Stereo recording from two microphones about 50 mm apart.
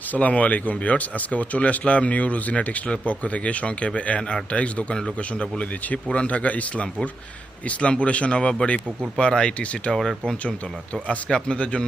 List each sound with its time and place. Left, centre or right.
0.1 s speech: left
9.9 s speech: centre
11.3 s speech: centre